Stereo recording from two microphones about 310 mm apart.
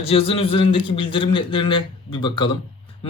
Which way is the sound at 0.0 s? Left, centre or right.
Centre.